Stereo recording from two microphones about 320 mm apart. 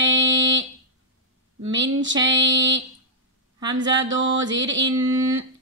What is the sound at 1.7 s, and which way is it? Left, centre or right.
Speech, right.